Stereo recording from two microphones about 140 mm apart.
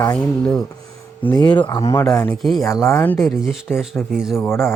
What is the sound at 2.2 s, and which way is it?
Speech, centre (ahead or behind).